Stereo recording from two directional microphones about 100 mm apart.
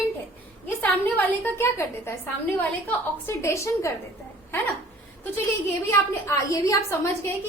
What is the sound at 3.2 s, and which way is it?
Speech, 30° left (ahead or behind).